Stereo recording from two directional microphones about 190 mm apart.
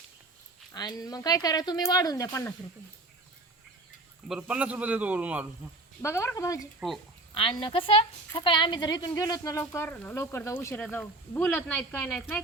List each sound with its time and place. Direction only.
0.7 s speech: 20° left (ahead or behind)
4.3 s a man's voice: 5° right (ahead or behind)
6.0 s speech: 15° left (ahead or behind)
6.7 s speech: centre (ahead or behind)
7.3 s speech: 25° left (ahead or behind); by 12.2 s 10° left (ahead or behind)